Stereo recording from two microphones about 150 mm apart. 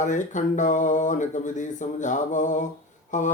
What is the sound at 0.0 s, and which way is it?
Speech, 55° left (ahead or behind).